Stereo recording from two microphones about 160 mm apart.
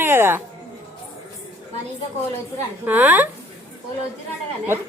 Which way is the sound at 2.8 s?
10° right (ahead or behind).